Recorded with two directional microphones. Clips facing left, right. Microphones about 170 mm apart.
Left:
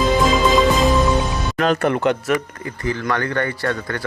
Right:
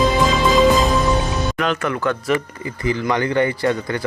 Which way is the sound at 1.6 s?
35° left (ahead or behind).